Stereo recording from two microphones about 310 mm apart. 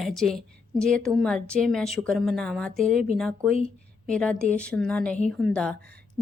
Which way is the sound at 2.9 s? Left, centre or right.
Right.